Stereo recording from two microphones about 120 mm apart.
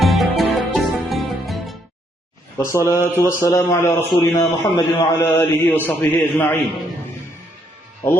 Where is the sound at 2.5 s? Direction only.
25° left (ahead or behind).